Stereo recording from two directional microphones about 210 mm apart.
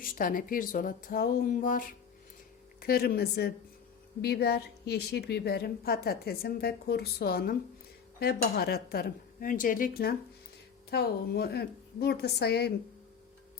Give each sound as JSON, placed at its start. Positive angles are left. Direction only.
{"t": 0.0, "sound": "a woman's voice", "side_deg": 40}